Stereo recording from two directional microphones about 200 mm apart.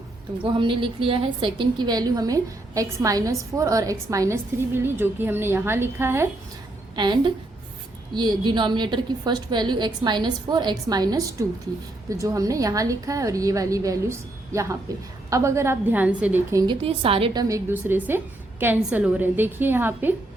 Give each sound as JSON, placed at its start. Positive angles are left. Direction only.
{"t": 0.4, "sound": "a woman's voice", "side_deg": -25}
{"t": 16.8, "sound": "a woman's voice", "side_deg": -30}